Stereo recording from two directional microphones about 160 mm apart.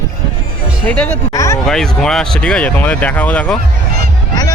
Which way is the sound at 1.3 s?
20° left (ahead or behind).